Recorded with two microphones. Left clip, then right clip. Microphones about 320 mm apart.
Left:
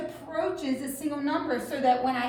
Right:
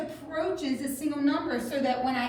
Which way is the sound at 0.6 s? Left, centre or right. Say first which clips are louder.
Even; centre.